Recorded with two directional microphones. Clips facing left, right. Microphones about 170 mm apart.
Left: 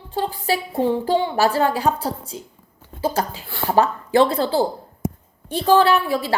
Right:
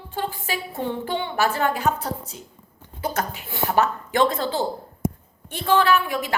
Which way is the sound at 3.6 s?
30° left (ahead or behind).